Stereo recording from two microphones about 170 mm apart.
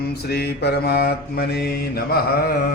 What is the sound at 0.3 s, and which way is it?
Mantra, 70° left (ahead or behind).